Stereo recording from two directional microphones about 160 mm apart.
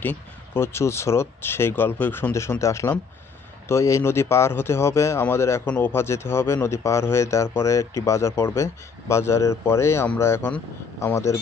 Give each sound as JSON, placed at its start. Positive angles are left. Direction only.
{"t": 0.0, "sound": "speech", "side_deg": 10}